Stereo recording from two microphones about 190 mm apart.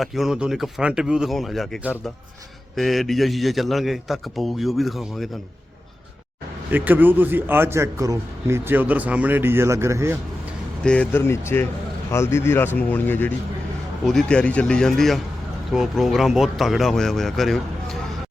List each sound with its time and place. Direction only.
0.0 s a man's voice: centre (ahead or behind)
6.7 s a man's voice: 10° right (ahead or behind)
10.8 s a man's voice: 5° left (ahead or behind)